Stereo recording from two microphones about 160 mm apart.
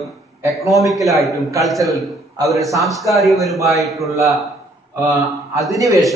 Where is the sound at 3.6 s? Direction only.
20° right (ahead or behind).